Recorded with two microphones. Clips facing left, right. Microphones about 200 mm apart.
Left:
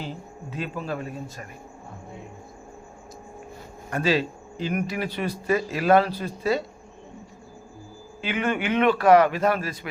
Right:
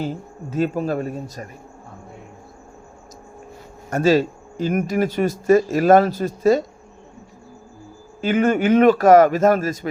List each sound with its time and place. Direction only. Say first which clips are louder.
0.0 s speech: right 8 dB; 45° right (ahead or behind)
3.8 s speech: right 7 dB; 45° right (ahead or behind)
8.2 s speech: right 8 dB; 45° right (ahead or behind)